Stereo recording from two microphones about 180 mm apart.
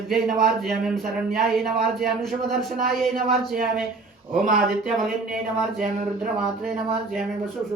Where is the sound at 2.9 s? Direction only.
Centre (ahead or behind).